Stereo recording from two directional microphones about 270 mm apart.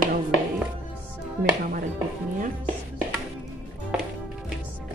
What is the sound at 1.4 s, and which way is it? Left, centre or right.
Speech, centre.